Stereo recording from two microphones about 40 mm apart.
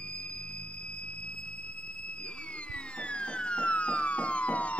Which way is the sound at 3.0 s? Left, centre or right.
Left.